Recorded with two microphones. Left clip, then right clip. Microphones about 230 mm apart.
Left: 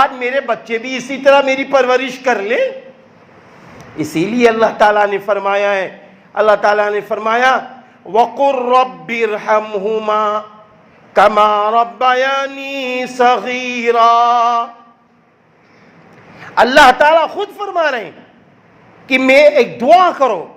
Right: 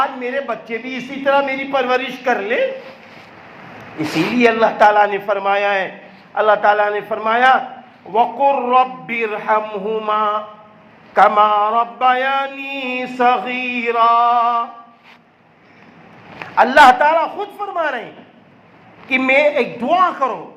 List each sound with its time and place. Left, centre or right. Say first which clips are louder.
0.0 s mantra: left 6 dB; left
3.8 s mantra: left 2 dB; left
6.3 s a man's voice: left 2 dB; left
8.1 s mantra: left 2 dB; left
16.6 s mantra: left 2 dB; left
19.0 s mantra: left 6 dB; left